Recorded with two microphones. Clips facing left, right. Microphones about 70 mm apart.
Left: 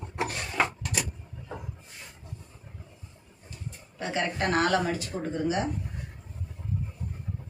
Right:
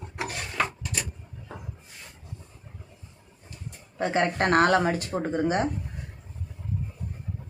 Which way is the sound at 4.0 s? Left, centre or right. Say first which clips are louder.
Right 5 dB; right.